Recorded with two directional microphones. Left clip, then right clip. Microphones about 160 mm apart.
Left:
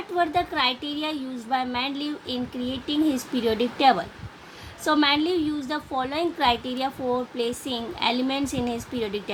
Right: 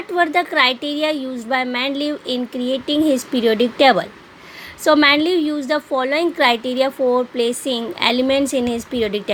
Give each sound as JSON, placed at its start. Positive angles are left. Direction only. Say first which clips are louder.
{"t": 0.2, "sound": "a woman's voice", "louder": "right 7 dB", "side_deg": -55}